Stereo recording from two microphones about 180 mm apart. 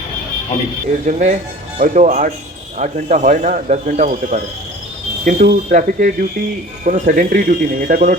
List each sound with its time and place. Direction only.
1.0 s speech: 40° right (ahead or behind)